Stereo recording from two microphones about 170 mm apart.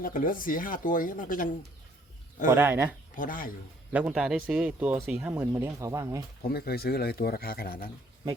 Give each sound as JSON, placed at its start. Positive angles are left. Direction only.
{"t": 0.0, "sound": "speech", "side_deg": 55}
{"t": 2.5, "sound": "speech", "side_deg": -15}
{"t": 3.2, "sound": "speech", "side_deg": 55}
{"t": 3.9, "sound": "speech", "side_deg": -5}
{"t": 6.5, "sound": "speech", "side_deg": 65}